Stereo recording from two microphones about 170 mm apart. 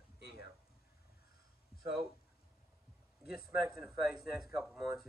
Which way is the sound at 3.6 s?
5° right (ahead or behind).